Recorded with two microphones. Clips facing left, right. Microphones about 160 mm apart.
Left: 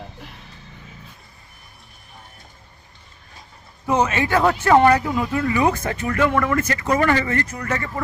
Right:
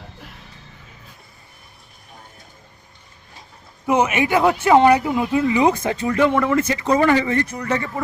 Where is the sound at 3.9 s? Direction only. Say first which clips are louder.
Right 2 dB; 15° right (ahead or behind).